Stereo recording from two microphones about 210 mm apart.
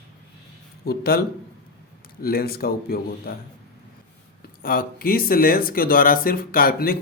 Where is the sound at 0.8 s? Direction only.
45° left (ahead or behind).